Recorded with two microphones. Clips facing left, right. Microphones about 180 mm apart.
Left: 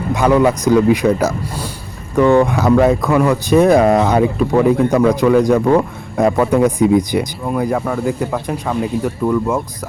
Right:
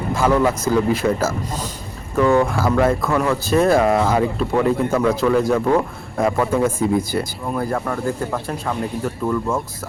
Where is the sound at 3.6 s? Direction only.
15° left (ahead or behind).